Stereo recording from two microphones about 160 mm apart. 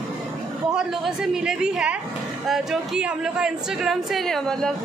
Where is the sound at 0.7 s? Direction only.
Centre (ahead or behind).